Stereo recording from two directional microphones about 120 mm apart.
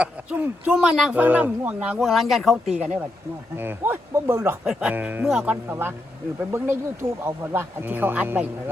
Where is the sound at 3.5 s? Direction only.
15° right (ahead or behind).